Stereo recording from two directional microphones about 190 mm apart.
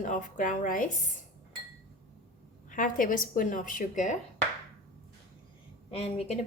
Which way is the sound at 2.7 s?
45° left (ahead or behind).